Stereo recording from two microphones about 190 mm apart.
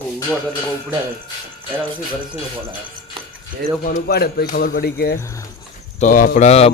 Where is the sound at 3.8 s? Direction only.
50° left (ahead or behind).